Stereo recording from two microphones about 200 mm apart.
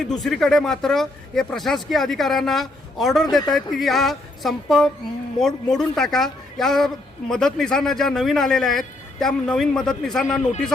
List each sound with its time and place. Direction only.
0.0 s speech: centre (ahead or behind)